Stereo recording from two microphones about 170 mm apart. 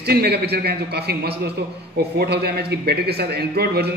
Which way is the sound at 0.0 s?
70° right (ahead or behind).